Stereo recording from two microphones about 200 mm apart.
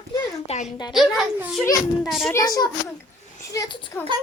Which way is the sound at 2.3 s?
15° left (ahead or behind).